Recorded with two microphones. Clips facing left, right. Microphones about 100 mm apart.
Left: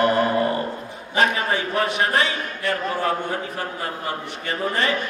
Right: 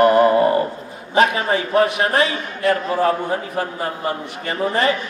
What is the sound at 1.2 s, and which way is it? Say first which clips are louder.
Mantra: right 4 dB; 30° right (ahead or behind).